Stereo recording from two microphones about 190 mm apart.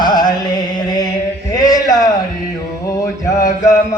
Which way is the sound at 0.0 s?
20° left (ahead or behind).